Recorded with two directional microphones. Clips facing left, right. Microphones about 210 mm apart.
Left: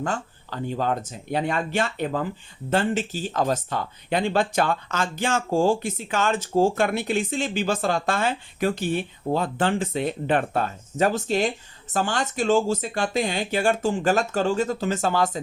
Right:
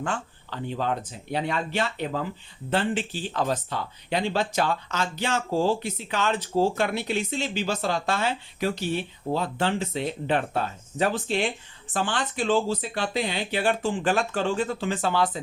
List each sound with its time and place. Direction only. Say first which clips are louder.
0.0 s speech: left 2 dB; 40° left (ahead or behind)